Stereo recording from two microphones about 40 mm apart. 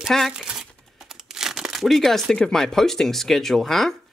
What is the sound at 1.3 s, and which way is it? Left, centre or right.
Crumpling, centre.